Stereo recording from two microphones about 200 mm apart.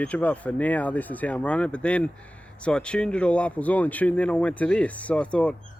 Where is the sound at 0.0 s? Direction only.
5° left (ahead or behind).